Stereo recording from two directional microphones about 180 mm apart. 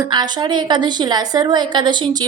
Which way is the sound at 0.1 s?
25° right (ahead or behind).